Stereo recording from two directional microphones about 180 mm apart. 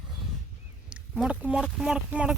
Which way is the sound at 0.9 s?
5° right (ahead or behind).